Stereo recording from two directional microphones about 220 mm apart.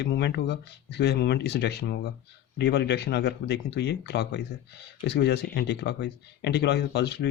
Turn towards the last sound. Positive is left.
turn(degrees=50)  # may be behind; listen again after turning